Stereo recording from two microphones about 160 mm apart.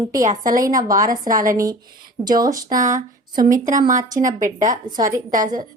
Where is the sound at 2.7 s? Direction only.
50° right (ahead or behind).